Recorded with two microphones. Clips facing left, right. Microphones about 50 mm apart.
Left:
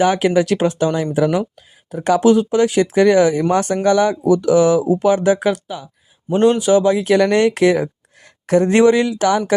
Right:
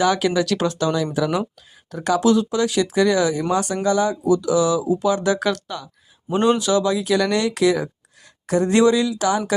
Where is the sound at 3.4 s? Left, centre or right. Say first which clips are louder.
Left 5 dB; left.